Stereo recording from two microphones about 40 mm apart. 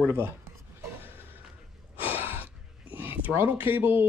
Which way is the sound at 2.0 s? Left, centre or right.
Right.